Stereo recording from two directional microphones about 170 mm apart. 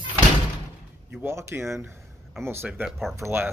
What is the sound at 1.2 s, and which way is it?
Speech, 15° right (ahead or behind).